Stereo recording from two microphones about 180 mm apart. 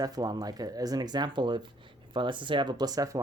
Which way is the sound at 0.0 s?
20° right (ahead or behind).